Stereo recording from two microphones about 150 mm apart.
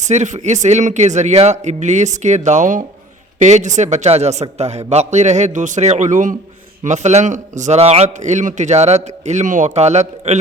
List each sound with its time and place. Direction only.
0.0 s a man's voice: 50° right (ahead or behind)